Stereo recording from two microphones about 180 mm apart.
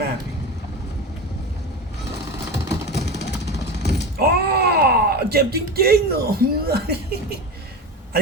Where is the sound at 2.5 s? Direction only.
70° left (ahead or behind).